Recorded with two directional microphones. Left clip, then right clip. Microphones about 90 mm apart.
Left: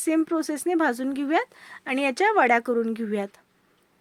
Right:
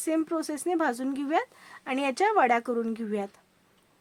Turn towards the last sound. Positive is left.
turn(degrees=40)  # may be behind; listen again after turning